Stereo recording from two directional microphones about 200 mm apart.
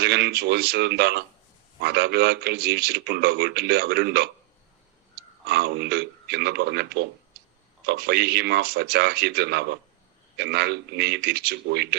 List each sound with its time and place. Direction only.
0.0 s speech: 55° right (ahead or behind)
5.5 s speech: 55° right (ahead or behind)